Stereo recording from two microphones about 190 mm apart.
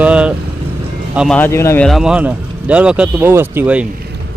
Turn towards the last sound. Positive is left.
turn(degrees=-10)  # may be behind; listen again after turning